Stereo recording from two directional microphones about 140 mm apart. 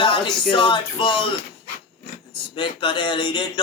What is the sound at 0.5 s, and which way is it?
Speech, 35° left (ahead or behind).